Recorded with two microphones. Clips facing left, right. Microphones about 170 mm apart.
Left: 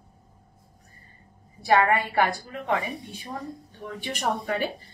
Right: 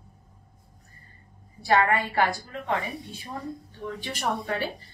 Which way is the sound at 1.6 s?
15° left (ahead or behind).